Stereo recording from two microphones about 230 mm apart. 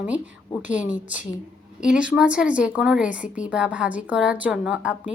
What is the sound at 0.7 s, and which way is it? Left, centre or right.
Speech, left.